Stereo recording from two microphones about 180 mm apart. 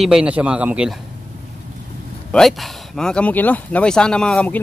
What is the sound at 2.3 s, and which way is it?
Speech, centre (ahead or behind).